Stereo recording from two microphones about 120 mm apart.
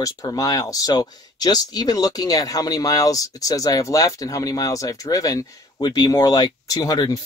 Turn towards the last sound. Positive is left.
turn(degrees=35)  # may be behind; listen again after turning